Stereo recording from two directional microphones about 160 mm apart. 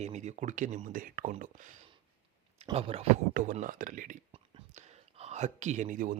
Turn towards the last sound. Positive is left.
turn(degrees=-55)  # may be behind; listen again after turning